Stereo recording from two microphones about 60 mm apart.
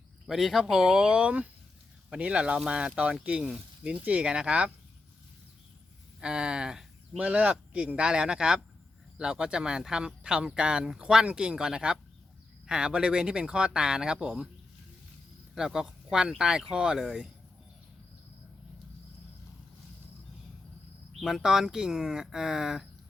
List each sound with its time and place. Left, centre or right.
0.3 s speech: centre
6.1 s speech: centre
7.2 s speech: right
15.5 s speech: centre
21.2 s speech: centre